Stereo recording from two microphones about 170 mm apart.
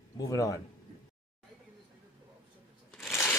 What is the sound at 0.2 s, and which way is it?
Speech, 20° left (ahead or behind).